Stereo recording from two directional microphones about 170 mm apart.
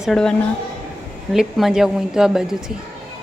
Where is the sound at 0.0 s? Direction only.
Centre (ahead or behind).